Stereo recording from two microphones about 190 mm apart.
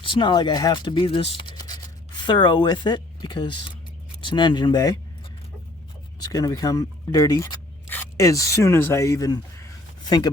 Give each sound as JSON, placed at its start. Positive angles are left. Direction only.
{"t": 0.0, "sound": "speech", "side_deg": 25}
{"t": 6.1, "sound": "speech", "side_deg": 20}